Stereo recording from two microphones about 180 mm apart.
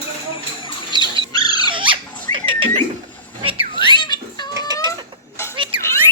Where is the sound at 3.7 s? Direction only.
25° left (ahead or behind).